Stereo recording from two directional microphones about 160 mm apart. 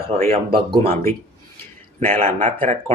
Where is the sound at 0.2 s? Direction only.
35° right (ahead or behind).